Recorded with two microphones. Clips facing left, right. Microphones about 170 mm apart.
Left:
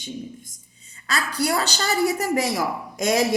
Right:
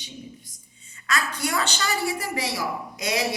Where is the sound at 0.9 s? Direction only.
35° left (ahead or behind).